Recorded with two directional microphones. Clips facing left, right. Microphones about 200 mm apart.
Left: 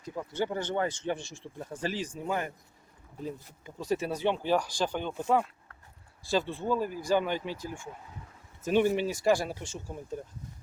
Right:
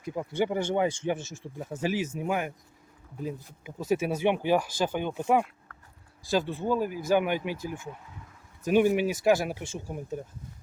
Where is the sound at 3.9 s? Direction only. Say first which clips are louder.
Right 3 dB; 10° right (ahead or behind).